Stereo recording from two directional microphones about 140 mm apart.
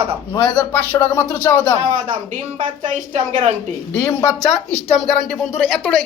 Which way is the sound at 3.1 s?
55° right (ahead or behind).